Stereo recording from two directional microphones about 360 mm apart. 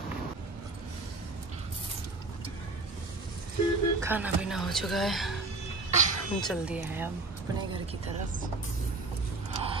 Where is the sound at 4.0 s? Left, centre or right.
Centre.